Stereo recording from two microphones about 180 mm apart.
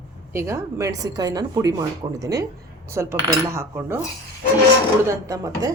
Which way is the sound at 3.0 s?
15° right (ahead or behind).